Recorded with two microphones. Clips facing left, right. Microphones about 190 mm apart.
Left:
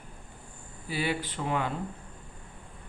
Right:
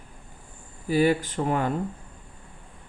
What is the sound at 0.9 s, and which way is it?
Mantra, 45° right (ahead or behind).